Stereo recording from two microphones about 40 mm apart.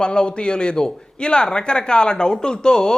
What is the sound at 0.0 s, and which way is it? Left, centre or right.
Speech, left.